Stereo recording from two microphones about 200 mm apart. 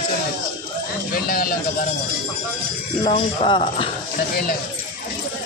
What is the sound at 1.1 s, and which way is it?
Speech, 45° left (ahead or behind).